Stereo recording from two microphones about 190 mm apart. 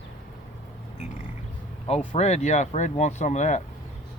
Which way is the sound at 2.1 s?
35° left (ahead or behind).